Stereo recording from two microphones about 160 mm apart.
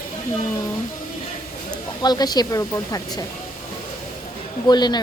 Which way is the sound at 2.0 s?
25° left (ahead or behind).